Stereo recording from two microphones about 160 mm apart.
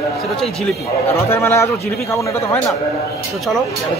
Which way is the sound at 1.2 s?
15° left (ahead or behind).